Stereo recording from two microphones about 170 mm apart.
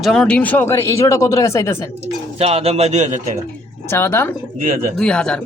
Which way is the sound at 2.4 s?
35° right (ahead or behind).